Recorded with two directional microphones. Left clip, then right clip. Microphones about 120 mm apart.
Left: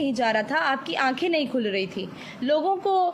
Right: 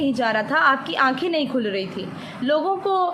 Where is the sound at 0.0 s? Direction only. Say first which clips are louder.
Right 2 dB; 35° left (ahead or behind).